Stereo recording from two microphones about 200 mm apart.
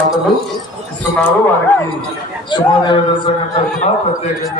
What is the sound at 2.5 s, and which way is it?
Speech, 20° left (ahead or behind).